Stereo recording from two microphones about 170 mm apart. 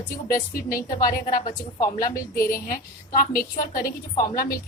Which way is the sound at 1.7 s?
20° left (ahead or behind).